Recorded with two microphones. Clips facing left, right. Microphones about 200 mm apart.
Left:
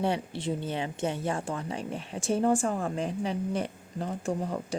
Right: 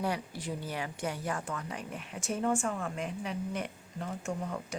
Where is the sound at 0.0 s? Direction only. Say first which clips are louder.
Left 5 dB; 25° left (ahead or behind).